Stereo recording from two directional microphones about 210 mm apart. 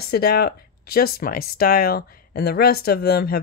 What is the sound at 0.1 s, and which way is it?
A woman's voice, 45° left (ahead or behind).